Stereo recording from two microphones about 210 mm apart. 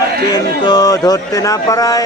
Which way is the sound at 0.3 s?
20° left (ahead or behind).